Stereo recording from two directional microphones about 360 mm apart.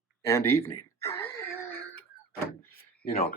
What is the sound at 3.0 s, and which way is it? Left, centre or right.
Speech, left.